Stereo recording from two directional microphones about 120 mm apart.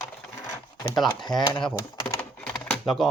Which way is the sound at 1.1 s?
35° left (ahead or behind).